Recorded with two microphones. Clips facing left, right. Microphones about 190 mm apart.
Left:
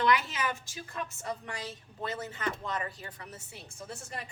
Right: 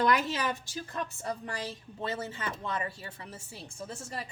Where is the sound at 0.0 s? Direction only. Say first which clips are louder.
Right 1 dB; 40° right (ahead or behind).